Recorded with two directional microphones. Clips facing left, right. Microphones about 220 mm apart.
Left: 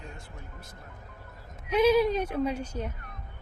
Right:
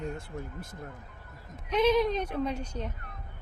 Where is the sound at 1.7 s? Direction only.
5° left (ahead or behind).